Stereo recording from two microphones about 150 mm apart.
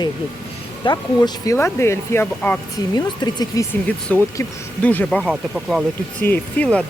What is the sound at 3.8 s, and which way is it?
Speech, 10° left (ahead or behind).